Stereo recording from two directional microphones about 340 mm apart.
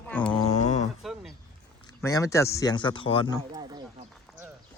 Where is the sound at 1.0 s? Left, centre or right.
Centre.